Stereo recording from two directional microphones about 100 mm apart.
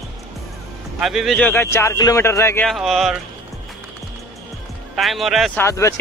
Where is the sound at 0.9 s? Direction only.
5° right (ahead or behind).